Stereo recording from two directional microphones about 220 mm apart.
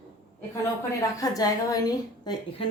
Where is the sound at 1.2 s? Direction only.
15° left (ahead or behind).